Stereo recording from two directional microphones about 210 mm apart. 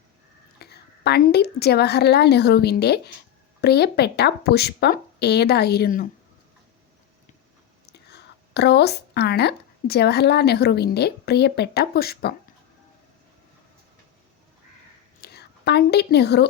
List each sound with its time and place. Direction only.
0.6 s a woman's voice: 50° left (ahead or behind)
7.9 s speech: 50° left (ahead or behind)
15.2 s a woman's voice: 50° left (ahead or behind)